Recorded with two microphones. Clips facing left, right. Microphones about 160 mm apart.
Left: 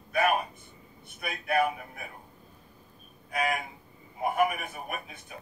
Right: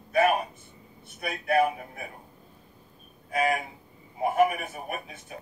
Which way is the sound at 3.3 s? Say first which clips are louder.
Right 4 dB; 30° right (ahead or behind).